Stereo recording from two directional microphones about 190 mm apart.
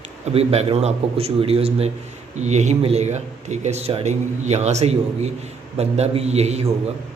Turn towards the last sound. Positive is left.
turn(degrees=-35)  # may be behind; listen again after turning